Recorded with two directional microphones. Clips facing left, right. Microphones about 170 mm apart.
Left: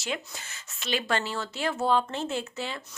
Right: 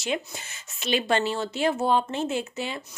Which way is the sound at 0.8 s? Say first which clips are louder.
Right 5 dB; 20° right (ahead or behind).